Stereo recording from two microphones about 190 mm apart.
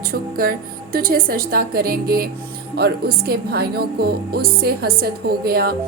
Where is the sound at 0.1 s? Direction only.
50° right (ahead or behind).